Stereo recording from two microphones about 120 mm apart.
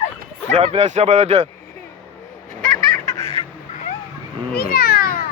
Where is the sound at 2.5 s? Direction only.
90° right.